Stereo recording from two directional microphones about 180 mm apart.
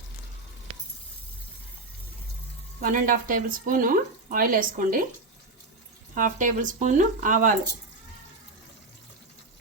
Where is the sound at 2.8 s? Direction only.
50° right (ahead or behind).